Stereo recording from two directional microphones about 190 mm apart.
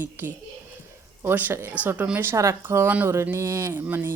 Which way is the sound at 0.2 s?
10° right (ahead or behind).